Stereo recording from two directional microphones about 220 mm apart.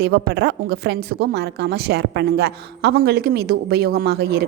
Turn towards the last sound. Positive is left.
turn(degrees=-45)  # may be behind; listen again after turning